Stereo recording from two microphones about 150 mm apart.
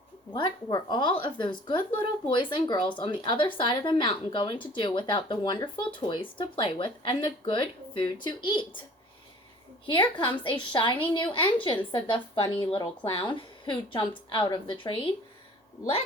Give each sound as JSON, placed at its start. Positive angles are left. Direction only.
{"t": 0.3, "sound": "speech", "side_deg": 30}
{"t": 9.8, "sound": "speech", "side_deg": 35}